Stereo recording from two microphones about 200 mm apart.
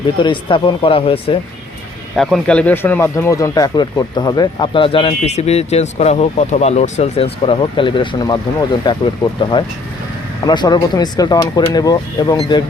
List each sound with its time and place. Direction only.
0.2 s speech: 25° left (ahead or behind)
2.1 s speech: centre (ahead or behind); by 12.6 s 20° left (ahead or behind)